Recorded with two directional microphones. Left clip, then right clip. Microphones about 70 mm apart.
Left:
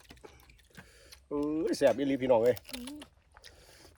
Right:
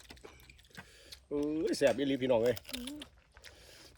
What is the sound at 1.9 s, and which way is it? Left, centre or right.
Speech, left.